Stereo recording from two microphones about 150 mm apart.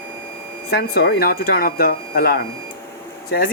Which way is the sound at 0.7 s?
90° left.